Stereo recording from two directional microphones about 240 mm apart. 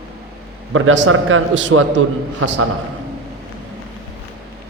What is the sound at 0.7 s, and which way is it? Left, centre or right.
A man's voice, right.